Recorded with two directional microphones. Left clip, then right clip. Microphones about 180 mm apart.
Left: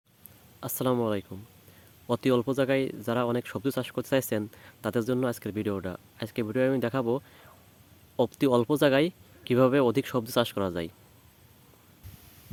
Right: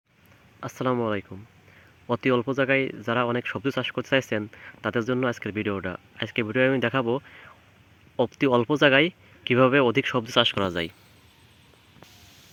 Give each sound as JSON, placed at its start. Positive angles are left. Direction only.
{"t": 0.6, "sound": "speech", "side_deg": 10}
{"t": 8.2, "sound": "speech", "side_deg": 10}